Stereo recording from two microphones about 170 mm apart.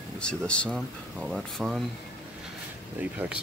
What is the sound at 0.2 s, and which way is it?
Speech, 5° left (ahead or behind).